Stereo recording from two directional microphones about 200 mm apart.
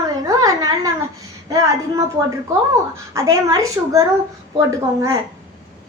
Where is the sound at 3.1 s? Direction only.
15° right (ahead or behind).